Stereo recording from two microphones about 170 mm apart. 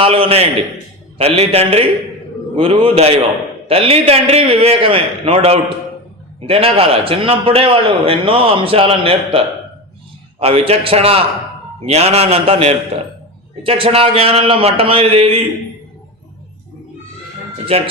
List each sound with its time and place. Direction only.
0.0 s a man's voice: 35° right (ahead or behind)
10.4 s a man's voice: 35° right (ahead or behind)
17.7 s a man's voice: 35° right (ahead or behind)